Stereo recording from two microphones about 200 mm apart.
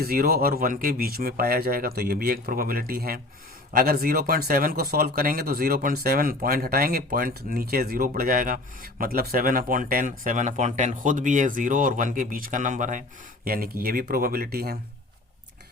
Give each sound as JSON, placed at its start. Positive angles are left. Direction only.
{"t": 0.0, "sound": "speech", "side_deg": -50}